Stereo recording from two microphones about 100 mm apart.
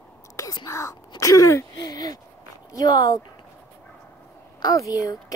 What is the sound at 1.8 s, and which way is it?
A woman's voice, 40° left (ahead or behind).